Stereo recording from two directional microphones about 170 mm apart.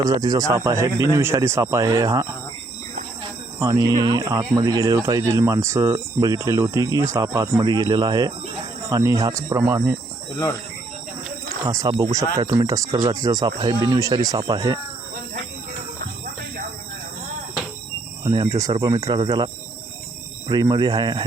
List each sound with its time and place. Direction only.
0.0 s speech: 25° right (ahead or behind)
3.6 s speech: 20° right (ahead or behind)
11.6 s speech: 20° right (ahead or behind)
16.0 s music: 55° right (ahead or behind)
18.4 s speech: 20° right (ahead or behind)
20.5 s speech: 25° right (ahead or behind)